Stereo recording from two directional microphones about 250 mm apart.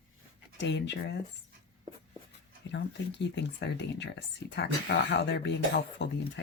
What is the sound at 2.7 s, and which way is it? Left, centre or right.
Speech, left.